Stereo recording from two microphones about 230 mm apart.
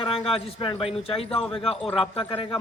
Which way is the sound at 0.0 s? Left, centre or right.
Left.